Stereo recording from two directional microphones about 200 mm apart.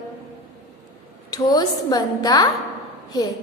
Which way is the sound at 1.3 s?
20° left (ahead or behind).